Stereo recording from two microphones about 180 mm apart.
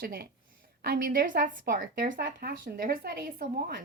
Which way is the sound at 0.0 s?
55° right (ahead or behind).